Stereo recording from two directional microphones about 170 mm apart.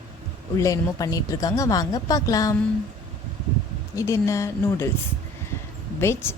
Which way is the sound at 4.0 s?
15° left (ahead or behind).